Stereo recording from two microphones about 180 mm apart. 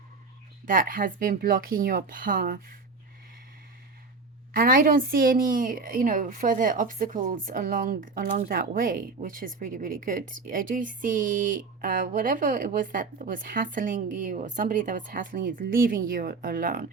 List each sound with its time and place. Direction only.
0.6 s speech: 50° right (ahead or behind)
4.5 s speech: 50° right (ahead or behind)